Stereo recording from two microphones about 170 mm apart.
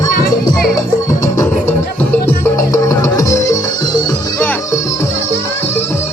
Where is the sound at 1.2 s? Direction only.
15° left (ahead or behind).